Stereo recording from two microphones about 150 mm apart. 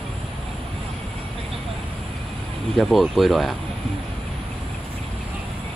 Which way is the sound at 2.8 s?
Centre (ahead or behind).